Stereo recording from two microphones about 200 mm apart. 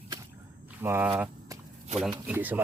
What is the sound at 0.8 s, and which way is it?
Speech, 10° right (ahead or behind).